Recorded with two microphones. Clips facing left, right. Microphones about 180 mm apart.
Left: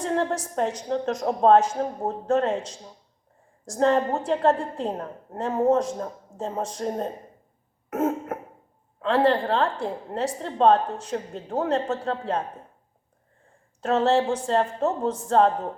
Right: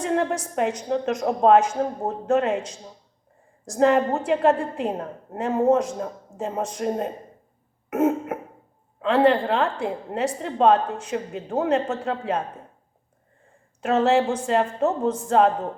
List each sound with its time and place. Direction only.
0.1 s a sound: 15° right (ahead or behind)
0.9 s a woman's voice: 10° right (ahead or behind)
3.8 s a woman's voice: 15° right (ahead or behind)
7.9 s cough: 15° right (ahead or behind)
9.0 s a woman's voice: 15° right (ahead or behind)
13.8 s a woman's voice: 10° right (ahead or behind)